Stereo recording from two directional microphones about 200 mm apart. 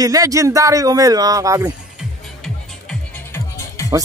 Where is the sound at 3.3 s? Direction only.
15° left (ahead or behind).